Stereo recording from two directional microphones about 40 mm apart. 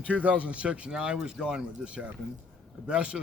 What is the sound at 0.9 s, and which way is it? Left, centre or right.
Speech, centre.